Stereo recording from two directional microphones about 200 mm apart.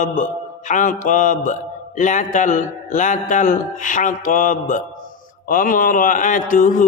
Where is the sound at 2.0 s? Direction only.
40° left (ahead or behind).